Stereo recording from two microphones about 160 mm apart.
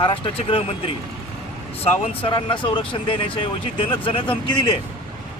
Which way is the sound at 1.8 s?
35° left (ahead or behind).